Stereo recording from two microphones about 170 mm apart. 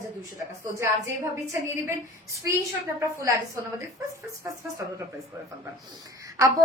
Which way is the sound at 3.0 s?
20° right (ahead or behind).